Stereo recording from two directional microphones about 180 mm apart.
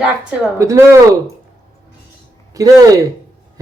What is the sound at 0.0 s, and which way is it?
Speech, 5° right (ahead or behind).